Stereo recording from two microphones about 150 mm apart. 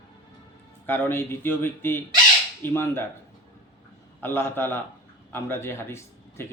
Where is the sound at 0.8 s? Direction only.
15° left (ahead or behind).